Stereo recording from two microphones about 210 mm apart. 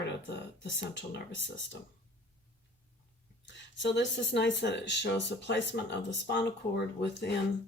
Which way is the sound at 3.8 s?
55° left (ahead or behind).